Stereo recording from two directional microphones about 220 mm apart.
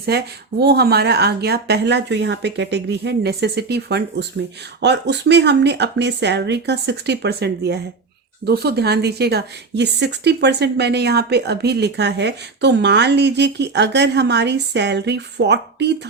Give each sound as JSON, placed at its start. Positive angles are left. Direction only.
{"t": 0.0, "sound": "speech", "side_deg": -45}